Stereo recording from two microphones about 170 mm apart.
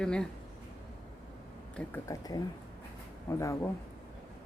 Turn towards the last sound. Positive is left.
turn(degrees=15)  # may be behind; listen again after turning